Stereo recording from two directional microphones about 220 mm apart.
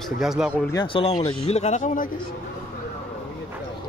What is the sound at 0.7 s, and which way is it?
Speech, 20° left (ahead or behind).